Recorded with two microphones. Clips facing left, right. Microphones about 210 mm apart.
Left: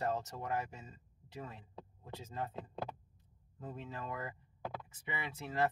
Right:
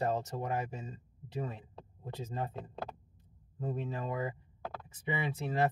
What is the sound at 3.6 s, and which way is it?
Speech, 30° right (ahead or behind).